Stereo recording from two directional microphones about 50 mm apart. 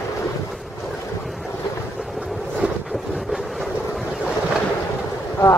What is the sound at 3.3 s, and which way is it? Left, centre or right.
Boat, centre.